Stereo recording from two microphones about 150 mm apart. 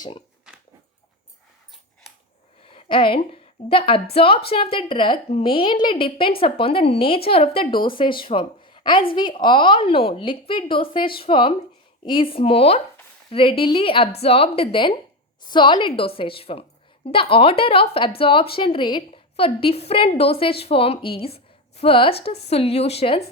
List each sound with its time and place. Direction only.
2.7 s a woman's voice: 35° left (ahead or behind)